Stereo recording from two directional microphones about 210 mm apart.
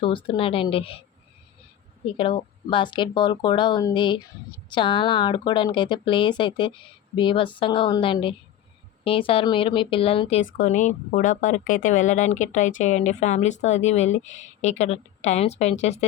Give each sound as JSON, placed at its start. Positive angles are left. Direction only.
{"t": 0.0, "sound": "a woman's voice", "side_deg": 25}
{"t": 2.1, "sound": "a woman's voice", "side_deg": 25}